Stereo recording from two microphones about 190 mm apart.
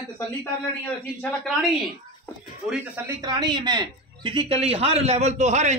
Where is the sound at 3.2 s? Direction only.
25° right (ahead or behind).